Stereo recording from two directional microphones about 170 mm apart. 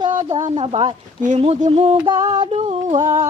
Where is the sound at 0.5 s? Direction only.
30° right (ahead or behind).